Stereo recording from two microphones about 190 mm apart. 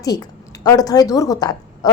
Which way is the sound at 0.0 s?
20° left (ahead or behind).